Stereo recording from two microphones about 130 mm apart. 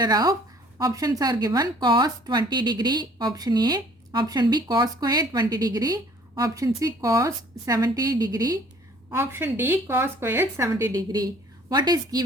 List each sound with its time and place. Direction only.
0.0 s speech: 30° right (ahead or behind)
9.0 s speech: 20° right (ahead or behind)